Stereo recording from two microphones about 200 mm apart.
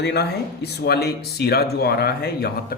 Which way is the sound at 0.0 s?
55° left (ahead or behind).